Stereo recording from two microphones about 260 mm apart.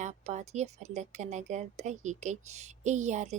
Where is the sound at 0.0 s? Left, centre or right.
Right.